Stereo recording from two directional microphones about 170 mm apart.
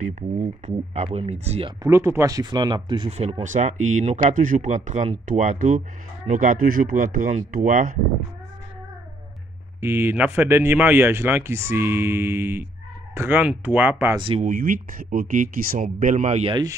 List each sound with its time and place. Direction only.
0.0 s speech: 45° right (ahead or behind)
1.8 s speech: 15° right (ahead or behind); by 8.0 s 50° right (ahead or behind)
9.8 s speech: 15° right (ahead or behind)
14.1 s speech: 30° right (ahead or behind)
14.4 s speech: 55° right (ahead or behind)